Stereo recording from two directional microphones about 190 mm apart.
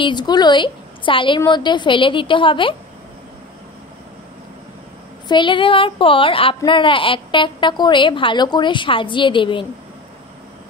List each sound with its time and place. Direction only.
0.0 s a woman's voice: 25° left (ahead or behind)
5.3 s a woman's voice: 25° left (ahead or behind)